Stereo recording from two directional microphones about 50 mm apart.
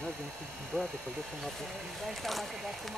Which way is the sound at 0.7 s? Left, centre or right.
Centre.